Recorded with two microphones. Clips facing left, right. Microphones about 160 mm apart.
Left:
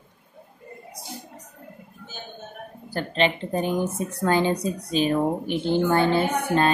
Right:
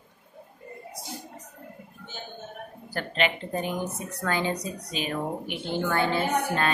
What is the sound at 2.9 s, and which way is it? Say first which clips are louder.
A woman's voice: left 4 dB; 30° left (ahead or behind).